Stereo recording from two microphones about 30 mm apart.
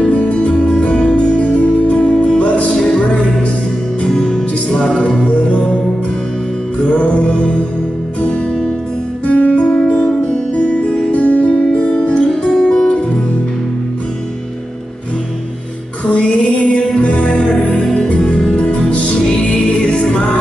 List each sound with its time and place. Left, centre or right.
0.1 s music: left
0.4 s music: left
1.4 s music: left
4.1 s music: left
6.9 s music: left
9.3 s music: left
11.1 s music: left
12.4 s music: left
16.1 s music: left
18.4 s music: left
18.7 s music: left